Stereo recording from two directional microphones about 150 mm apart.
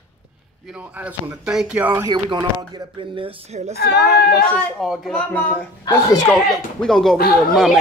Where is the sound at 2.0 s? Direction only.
30° right (ahead or behind); by 3.7 s 45° right (ahead or behind).